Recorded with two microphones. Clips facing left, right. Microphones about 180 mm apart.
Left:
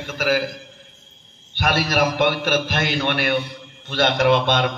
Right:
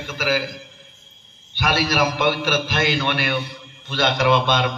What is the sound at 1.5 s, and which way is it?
A man's voice, 55° left (ahead or behind).